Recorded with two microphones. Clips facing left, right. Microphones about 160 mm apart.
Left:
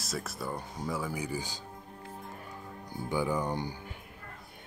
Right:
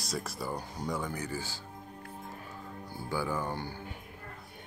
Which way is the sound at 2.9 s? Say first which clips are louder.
Left 3 dB; 20° left (ahead or behind).